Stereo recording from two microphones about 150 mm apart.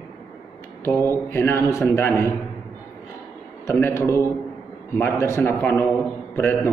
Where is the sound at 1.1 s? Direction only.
15° left (ahead or behind).